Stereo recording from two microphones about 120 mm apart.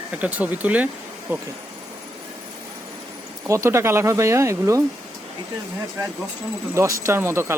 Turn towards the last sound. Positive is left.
turn(degrees=-20)  # may be behind; listen again after turning